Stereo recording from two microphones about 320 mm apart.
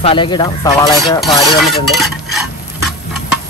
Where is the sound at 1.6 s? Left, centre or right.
Centre.